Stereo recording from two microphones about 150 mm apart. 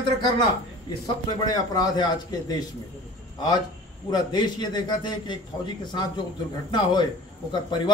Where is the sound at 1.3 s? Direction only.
25° left (ahead or behind).